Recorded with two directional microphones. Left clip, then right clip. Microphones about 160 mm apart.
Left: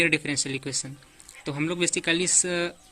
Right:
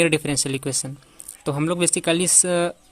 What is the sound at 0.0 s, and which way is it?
A man's voice, 45° right (ahead or behind).